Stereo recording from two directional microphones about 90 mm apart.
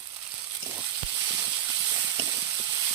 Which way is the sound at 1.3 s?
40° right (ahead or behind).